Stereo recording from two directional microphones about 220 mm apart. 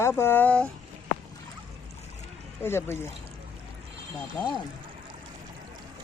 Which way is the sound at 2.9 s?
30° right (ahead or behind).